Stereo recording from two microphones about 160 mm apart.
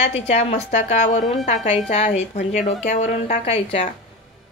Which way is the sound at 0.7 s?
50° left (ahead or behind).